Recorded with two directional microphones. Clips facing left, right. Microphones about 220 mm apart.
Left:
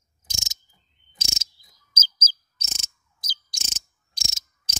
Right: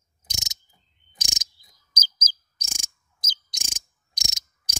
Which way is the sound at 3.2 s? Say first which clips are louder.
Even; 20° right (ahead or behind).